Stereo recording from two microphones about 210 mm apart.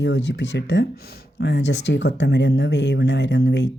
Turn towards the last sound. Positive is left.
turn(degrees=55)  # may be behind; listen again after turning